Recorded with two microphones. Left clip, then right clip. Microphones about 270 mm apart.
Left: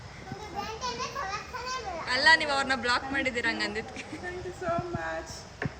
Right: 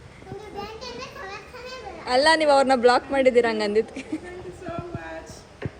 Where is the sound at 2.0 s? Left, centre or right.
Centre.